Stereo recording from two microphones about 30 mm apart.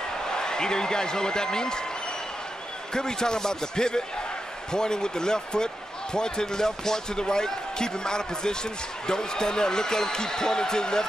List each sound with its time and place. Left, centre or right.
0.3 s speech: left
2.9 s speech: left